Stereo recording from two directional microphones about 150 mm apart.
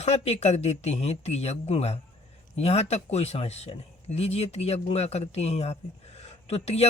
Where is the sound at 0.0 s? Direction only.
45° left (ahead or behind).